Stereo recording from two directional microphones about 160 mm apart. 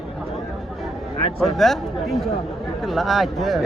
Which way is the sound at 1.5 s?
Centre (ahead or behind).